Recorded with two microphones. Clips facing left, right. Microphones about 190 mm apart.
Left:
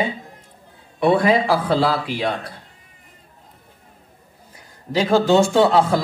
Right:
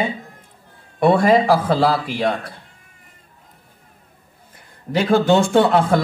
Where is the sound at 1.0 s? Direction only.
45° right (ahead or behind).